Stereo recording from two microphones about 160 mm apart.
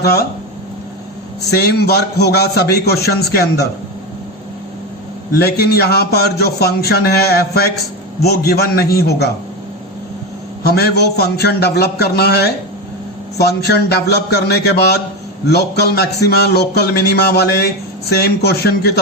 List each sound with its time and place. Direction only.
0.0 s a man's voice: 90° left
1.5 s a man's voice: 90° left
5.4 s a man's voice: 80° left
10.6 s a man's voice: 80° left